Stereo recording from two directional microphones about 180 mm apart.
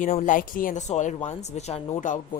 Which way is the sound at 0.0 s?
45° left (ahead or behind).